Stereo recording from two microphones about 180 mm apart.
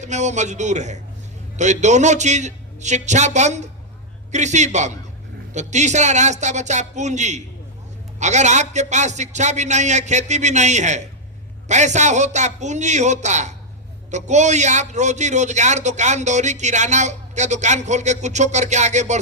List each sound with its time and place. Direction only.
0.0 s a man's voice: 40° right (ahead or behind)